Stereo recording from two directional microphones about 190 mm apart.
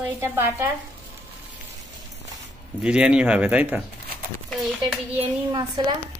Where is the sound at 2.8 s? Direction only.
5° right (ahead or behind).